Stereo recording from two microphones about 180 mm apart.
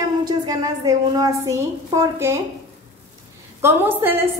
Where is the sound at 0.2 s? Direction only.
20° right (ahead or behind).